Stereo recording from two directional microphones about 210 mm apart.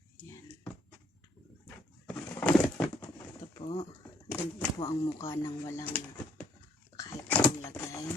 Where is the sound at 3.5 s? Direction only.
25° left (ahead or behind).